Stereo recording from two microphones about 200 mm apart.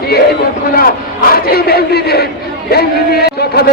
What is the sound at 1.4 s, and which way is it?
A man's voice, 50° left (ahead or behind).